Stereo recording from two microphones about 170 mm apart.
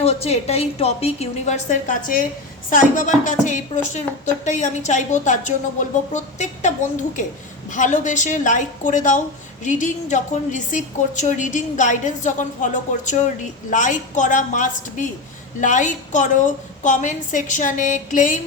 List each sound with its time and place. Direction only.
0.0 s a woman's voice: 35° left (ahead or behind)